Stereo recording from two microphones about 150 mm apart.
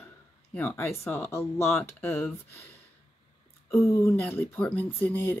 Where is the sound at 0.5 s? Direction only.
10° left (ahead or behind).